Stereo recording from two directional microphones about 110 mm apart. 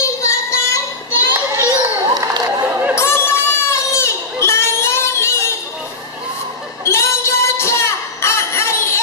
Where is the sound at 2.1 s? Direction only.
30° right (ahead or behind).